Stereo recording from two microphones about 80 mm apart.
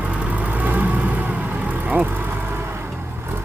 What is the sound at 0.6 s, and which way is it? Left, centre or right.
Vehicle, right.